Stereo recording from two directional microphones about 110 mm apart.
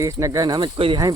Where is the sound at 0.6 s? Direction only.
55° right (ahead or behind).